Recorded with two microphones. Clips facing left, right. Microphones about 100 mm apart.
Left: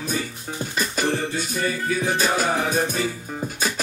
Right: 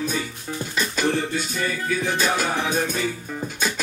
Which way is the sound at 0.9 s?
45° left (ahead or behind).